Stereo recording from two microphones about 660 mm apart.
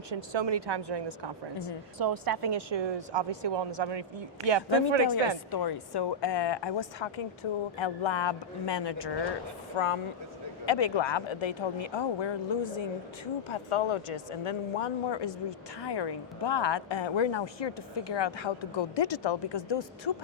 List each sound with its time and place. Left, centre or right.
0.3 s a woman's voice: right
5.5 s speech: left
9.7 s speech: left